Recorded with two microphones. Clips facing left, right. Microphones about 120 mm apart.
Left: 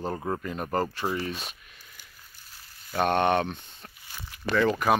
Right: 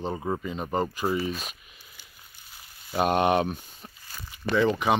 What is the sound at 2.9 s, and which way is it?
Speech, 10° right (ahead or behind).